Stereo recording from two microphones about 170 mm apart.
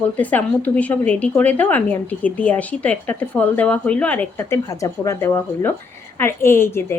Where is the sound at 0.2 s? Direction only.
10° left (ahead or behind).